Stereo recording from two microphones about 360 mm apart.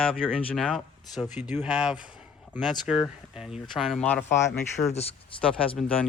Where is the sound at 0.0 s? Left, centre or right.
Centre.